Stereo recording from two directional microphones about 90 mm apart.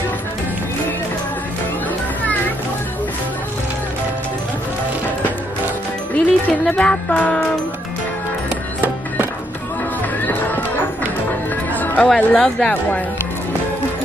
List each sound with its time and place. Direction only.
6.1 s speech: 10° left (ahead or behind)
8.5 s music: 15° right (ahead or behind)
11.7 s music: 20° left (ahead or behind)
12.2 s speech: 10° left (ahead or behind)